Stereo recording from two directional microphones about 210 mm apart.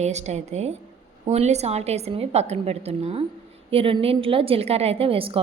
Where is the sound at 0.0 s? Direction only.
35° right (ahead or behind).